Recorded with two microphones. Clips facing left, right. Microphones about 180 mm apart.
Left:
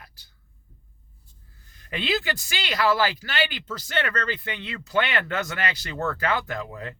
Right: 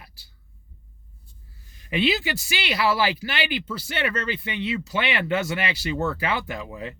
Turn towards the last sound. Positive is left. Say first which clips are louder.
# even
turn(degrees=-10)  # may be behind; listen again after turning